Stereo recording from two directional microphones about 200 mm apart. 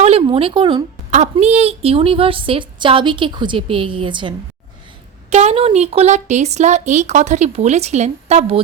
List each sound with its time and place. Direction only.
0.0 s a woman's voice: 30° right (ahead or behind)
1.1 s a woman's voice: 35° right (ahead or behind)